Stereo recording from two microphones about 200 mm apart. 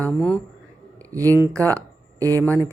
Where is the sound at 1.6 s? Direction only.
10° left (ahead or behind).